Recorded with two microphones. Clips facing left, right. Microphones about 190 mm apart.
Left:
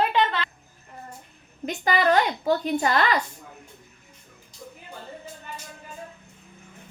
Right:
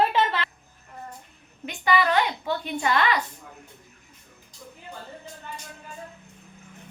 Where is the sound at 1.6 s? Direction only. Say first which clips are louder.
Left 1 dB; 40° left (ahead or behind).